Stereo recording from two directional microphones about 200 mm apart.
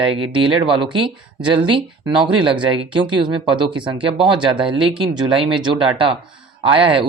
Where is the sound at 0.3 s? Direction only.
25° right (ahead or behind).